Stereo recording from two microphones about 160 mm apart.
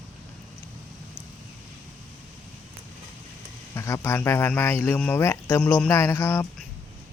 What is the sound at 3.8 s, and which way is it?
Speech, 15° left (ahead or behind).